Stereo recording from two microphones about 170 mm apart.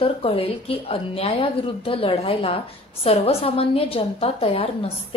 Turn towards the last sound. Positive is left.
turn(degrees=35)  # may be behind; listen again after turning